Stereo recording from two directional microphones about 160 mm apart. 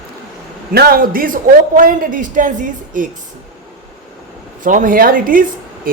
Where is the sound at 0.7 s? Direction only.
70° right (ahead or behind).